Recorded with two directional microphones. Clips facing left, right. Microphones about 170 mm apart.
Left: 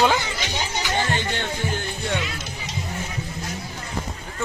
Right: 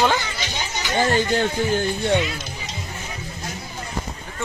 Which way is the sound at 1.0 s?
40° right (ahead or behind).